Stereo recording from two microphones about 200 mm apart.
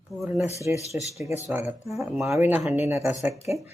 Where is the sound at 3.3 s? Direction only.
30° left (ahead or behind).